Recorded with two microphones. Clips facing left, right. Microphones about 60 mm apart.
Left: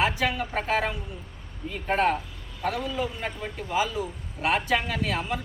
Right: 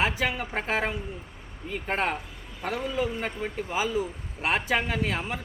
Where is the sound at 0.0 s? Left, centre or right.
Right.